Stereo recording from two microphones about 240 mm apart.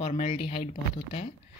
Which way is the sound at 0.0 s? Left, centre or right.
Left.